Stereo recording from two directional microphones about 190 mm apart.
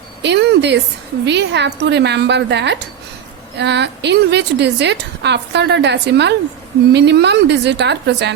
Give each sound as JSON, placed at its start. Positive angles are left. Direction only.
{"t": 0.2, "sound": "a woman's voice", "side_deg": -65}